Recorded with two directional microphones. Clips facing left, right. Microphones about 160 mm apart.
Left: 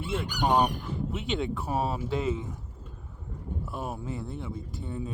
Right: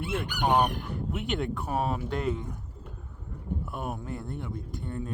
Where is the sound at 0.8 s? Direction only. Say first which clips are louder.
Even; centre (ahead or behind).